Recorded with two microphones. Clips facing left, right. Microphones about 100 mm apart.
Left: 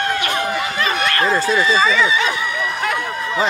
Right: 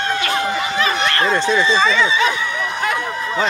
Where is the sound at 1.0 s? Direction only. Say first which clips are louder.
Even; 25° right (ahead or behind).